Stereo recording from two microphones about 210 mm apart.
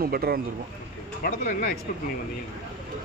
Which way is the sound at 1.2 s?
45° left (ahead or behind).